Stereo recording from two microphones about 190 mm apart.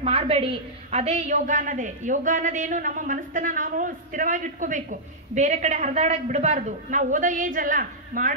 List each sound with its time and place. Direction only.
0.0 s a woman's voice: 30° right (ahead or behind)